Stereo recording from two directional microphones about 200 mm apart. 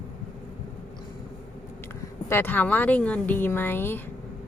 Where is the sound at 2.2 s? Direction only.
10° left (ahead or behind).